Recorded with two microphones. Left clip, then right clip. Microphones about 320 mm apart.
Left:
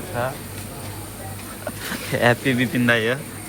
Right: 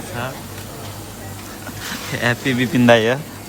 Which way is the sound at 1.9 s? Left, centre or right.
Centre.